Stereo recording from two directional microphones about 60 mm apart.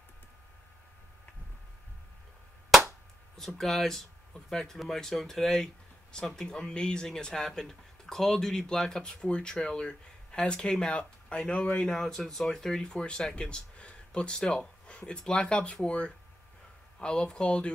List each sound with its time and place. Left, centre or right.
3.3 s speech: centre
11.9 s speech: centre